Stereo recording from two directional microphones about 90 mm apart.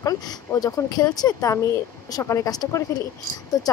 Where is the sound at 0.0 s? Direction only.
45° left (ahead or behind).